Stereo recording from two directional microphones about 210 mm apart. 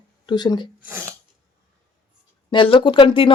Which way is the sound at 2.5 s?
25° left (ahead or behind).